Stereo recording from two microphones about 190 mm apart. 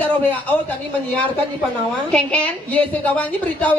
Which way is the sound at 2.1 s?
5° left (ahead or behind).